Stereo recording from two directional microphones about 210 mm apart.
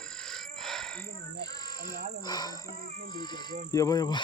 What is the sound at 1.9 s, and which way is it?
Frog, 20° left (ahead or behind).